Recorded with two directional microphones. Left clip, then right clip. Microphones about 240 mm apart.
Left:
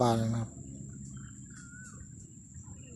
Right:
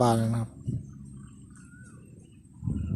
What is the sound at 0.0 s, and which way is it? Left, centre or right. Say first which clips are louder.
Speech: right 4 dB; centre.